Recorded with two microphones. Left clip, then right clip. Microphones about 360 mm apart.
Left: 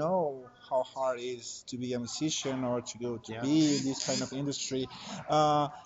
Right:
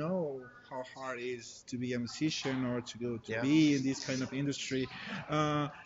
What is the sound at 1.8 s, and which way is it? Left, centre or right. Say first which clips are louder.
Speech: left 2 dB; centre.